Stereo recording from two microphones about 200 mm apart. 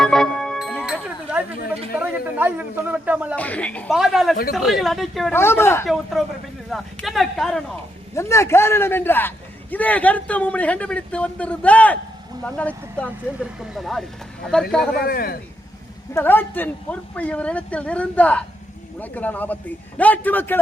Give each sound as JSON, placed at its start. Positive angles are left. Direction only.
{"t": 0.0, "sound": "music", "side_deg": 5}
{"t": 2.0, "sound": "a man's voice", "side_deg": -10}
{"t": 3.3, "sound": "a man's voice", "side_deg": 5}
{"t": 5.3, "sound": "a man's voice", "side_deg": 10}
{"t": 6.2, "sound": "a man's voice", "side_deg": 0}
{"t": 8.1, "sound": "a man's voice", "side_deg": 15}
{"t": 14.9, "sound": "a man's voice", "side_deg": 50}
{"t": 16.1, "sound": "a man's voice", "side_deg": 10}